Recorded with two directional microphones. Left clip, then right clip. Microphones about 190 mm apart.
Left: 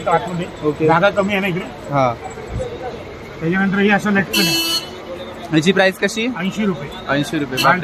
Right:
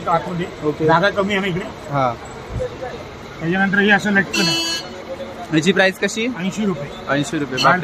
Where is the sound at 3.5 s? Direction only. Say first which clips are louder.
Right 1 dB; 15° left (ahead or behind).